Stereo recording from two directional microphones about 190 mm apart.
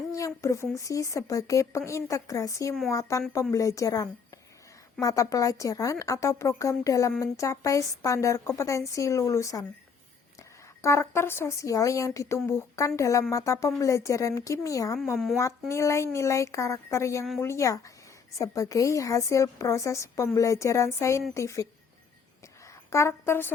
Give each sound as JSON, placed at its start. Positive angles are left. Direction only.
{"t": 0.2, "sound": "a woman's voice", "side_deg": 15}
{"t": 10.8, "sound": "a woman's voice", "side_deg": 15}